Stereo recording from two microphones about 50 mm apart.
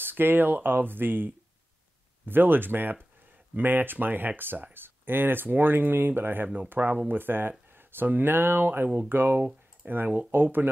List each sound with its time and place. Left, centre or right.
0.0 s speech: right